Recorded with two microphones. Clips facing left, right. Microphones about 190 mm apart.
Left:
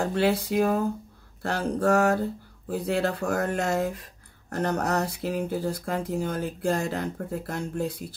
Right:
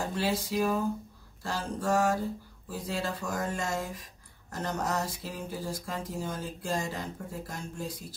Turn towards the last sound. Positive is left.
turn(degrees=65)  # may be behind; listen again after turning